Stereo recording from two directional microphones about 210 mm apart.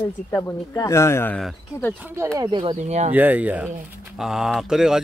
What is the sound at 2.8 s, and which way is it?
Speech, 35° right (ahead or behind).